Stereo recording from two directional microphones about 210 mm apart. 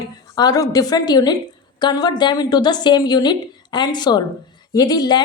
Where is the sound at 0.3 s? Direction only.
15° left (ahead or behind).